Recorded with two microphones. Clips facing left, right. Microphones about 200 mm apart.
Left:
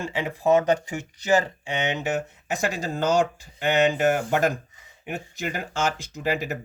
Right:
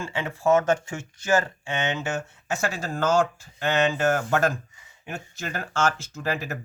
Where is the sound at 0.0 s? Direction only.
15° left (ahead or behind).